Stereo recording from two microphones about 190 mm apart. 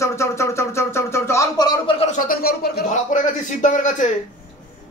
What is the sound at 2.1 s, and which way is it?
Speech, 50° left (ahead or behind).